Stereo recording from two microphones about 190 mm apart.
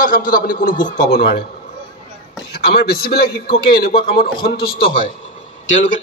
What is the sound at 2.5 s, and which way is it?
A man's voice, 55° left (ahead or behind).